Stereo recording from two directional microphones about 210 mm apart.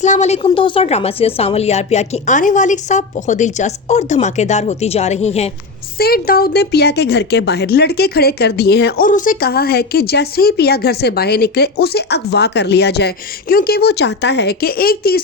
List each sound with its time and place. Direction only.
0.0 s a woman's voice: 35° left (ahead or behind)
6.0 s speech: 45° left (ahead or behind)